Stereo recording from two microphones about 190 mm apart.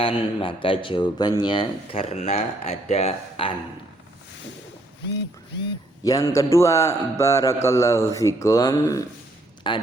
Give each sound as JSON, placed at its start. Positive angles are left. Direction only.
{"t": 0.0, "sound": "speech", "side_deg": 30}
{"t": 6.1, "sound": "a man's voice", "side_deg": 15}